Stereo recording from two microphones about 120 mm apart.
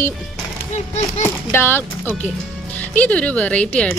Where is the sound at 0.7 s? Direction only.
70° left (ahead or behind).